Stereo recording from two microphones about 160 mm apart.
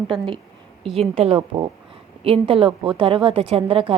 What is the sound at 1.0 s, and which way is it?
A woman's voice, 40° right (ahead or behind).